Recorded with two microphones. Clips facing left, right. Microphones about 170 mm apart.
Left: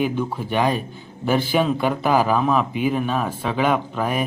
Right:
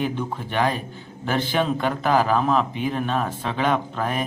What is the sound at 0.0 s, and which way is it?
Speech, 5° left (ahead or behind).